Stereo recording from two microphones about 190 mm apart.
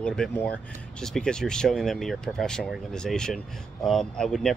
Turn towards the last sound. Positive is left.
turn(degrees=5)  # may be behind; listen again after turning